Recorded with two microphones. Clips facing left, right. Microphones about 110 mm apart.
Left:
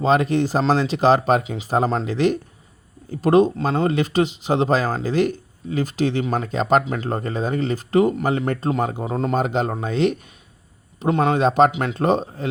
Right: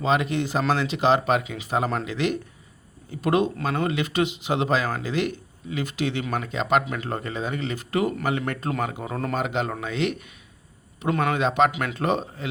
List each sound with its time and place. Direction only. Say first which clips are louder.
0.0 s speech: left 5 dB; 35° left (ahead or behind)
9.4 s speech: left 5 dB; 35° left (ahead or behind)
11.7 s speech: left 5 dB; 25° left (ahead or behind)